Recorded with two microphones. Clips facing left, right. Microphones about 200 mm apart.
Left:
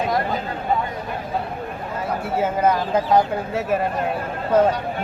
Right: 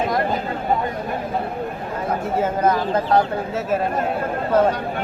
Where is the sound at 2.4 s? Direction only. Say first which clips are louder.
Left 1 dB; 10° left (ahead or behind).